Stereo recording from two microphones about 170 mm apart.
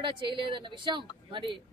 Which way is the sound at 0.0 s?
30° right (ahead or behind).